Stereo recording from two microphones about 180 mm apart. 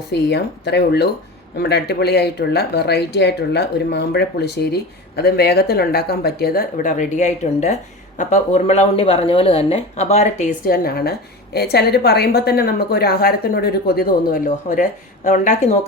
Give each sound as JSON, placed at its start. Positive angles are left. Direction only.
{"t": 0.1, "sound": "a woman's voice", "side_deg": 70}
{"t": 10.7, "sound": "speech", "side_deg": 60}